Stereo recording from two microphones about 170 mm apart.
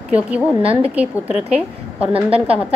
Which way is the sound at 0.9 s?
10° right (ahead or behind).